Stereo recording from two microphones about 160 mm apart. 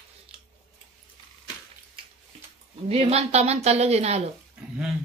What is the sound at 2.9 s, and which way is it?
A woman's voice, 40° right (ahead or behind).